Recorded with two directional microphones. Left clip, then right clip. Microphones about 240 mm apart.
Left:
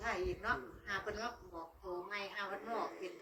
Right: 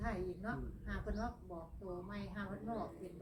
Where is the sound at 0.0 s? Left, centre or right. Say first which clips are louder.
Left 4 dB; left.